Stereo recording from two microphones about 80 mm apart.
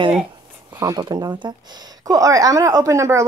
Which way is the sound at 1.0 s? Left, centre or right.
Right.